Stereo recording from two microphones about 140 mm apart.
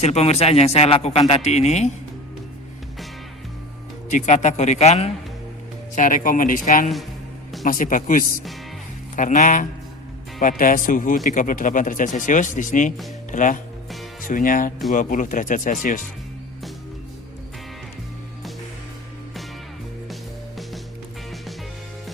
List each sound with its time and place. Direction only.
0.0 s a man's voice: 50° left (ahead or behind)
4.1 s a man's voice: 55° left (ahead or behind)
5.9 s speech: 70° left (ahead or behind)